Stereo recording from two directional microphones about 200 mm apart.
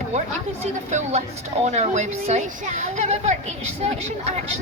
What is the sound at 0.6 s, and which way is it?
Speech, 35° right (ahead or behind).